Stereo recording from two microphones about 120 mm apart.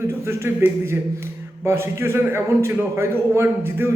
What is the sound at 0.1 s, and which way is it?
A man's voice, 20° right (ahead or behind).